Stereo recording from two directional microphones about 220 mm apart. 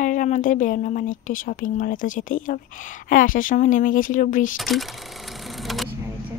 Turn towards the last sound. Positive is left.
turn(degrees=0)  # may be behind; listen again after turning